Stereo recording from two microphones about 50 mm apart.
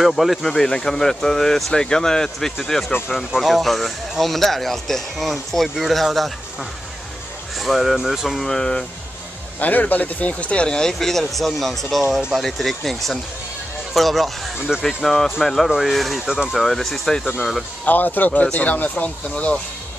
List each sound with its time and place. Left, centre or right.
0.0 s speech: centre
7.5 s speech: centre
8.5 s speech: centre
9.6 s speech: left; by 14.5 s centre
14.7 s speech: centre
15.0 s speech: centre
17.8 s speech: left